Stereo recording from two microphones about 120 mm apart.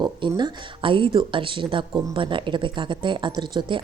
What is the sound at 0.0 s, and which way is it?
Speech, 35° right (ahead or behind).